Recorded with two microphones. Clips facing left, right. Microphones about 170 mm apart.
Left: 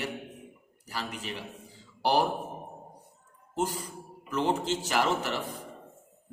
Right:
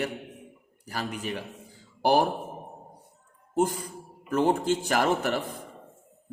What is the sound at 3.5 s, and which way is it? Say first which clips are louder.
A man's voice: right 5 dB; 55° right (ahead or behind).